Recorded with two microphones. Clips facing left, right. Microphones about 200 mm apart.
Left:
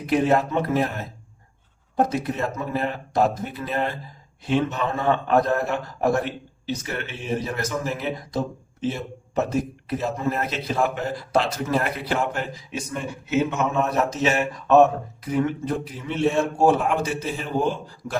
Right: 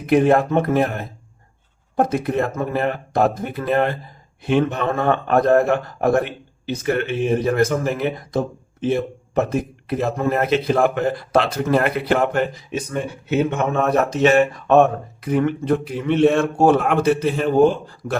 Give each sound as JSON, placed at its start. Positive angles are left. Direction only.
{"t": 0.0, "sound": "a man's voice", "side_deg": -55}